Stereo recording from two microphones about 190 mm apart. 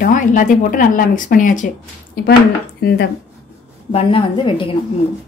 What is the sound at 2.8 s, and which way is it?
Speech, 50° left (ahead or behind).